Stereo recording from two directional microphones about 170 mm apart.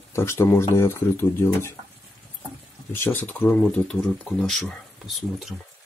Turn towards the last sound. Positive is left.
turn(degrees=0)  # may be behind; listen again after turning